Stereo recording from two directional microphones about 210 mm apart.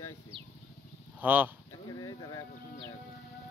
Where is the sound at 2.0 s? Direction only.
15° left (ahead or behind).